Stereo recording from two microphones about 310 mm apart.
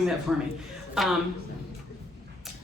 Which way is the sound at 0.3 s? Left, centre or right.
Centre.